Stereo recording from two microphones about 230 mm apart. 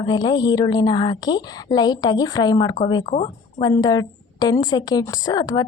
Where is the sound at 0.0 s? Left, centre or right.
Centre.